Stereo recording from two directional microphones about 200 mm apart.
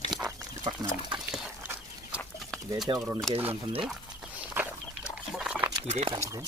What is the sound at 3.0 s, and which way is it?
Speech, 10° right (ahead or behind).